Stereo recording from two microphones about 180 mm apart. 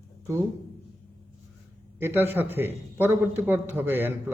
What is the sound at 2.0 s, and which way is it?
A man's voice, 10° right (ahead or behind).